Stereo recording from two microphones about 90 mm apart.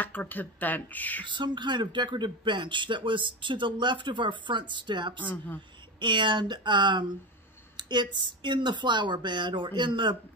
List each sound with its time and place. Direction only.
0.0 s speech: 20° left (ahead or behind)
1.2 s speech: 60° right (ahead or behind)
5.2 s speech: 20° left (ahead or behind)
5.9 s speech: 60° right (ahead or behind)